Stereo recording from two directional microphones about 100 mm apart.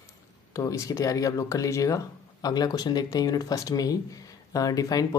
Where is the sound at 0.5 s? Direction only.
35° left (ahead or behind).